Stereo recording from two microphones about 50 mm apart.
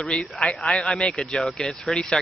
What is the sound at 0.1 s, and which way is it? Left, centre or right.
Speech, centre.